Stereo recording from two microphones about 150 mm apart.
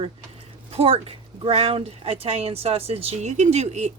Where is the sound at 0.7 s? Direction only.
40° right (ahead or behind).